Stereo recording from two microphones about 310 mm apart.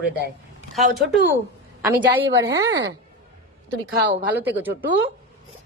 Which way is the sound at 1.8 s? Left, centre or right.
Centre.